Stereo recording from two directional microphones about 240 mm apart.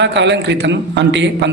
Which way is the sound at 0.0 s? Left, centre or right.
Right.